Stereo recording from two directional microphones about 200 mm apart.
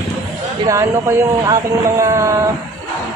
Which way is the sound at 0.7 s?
15° right (ahead or behind).